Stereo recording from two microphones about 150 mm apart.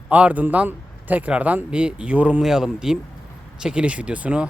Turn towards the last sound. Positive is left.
turn(degrees=-10)  # may be behind; listen again after turning